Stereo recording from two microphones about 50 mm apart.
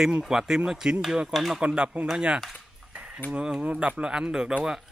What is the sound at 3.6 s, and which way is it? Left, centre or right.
Speech, right.